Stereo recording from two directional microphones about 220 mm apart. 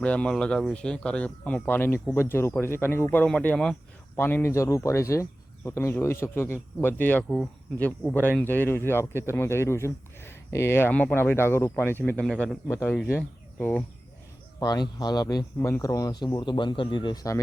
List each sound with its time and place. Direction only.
0.0 s speech: 5° left (ahead or behind)
14.6 s speech: 20° left (ahead or behind)